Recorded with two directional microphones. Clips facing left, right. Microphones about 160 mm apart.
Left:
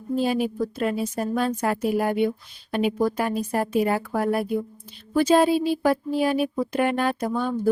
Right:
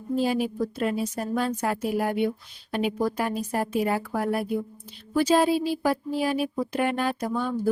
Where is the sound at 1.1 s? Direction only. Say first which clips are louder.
Left 2 dB; 55° left (ahead or behind).